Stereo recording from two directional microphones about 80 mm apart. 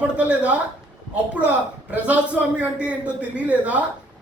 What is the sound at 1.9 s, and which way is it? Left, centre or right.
A man's voice, centre.